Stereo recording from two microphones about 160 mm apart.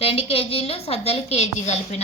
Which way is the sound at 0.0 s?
35° left (ahead or behind).